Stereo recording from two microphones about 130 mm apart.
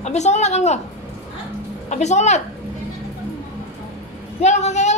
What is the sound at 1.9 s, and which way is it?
Speech, 60° left (ahead or behind).